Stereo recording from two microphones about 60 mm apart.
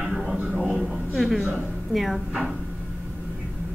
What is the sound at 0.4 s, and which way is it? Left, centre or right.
Music, centre.